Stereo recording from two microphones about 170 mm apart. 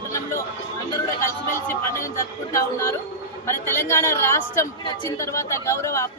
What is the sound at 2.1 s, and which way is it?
A man's voice, 15° left (ahead or behind).